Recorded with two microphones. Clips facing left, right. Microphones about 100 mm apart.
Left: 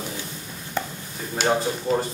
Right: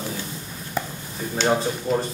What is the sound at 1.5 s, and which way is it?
Speech, centre (ahead or behind).